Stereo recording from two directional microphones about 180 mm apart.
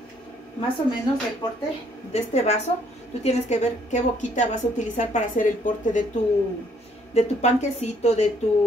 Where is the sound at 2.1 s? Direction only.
35° left (ahead or behind).